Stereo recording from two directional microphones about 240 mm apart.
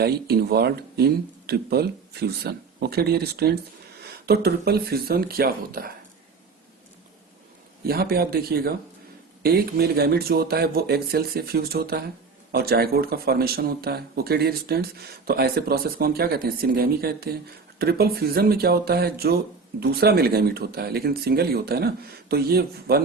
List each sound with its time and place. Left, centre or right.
0.0 s speech: right
7.9 s speech: right